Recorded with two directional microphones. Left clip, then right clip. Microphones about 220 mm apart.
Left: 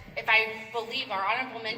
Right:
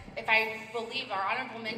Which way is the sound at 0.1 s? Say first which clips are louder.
Left 3 dB; 25° left (ahead or behind).